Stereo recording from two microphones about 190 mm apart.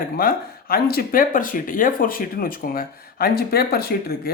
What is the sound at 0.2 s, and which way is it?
Speech, 50° left (ahead or behind).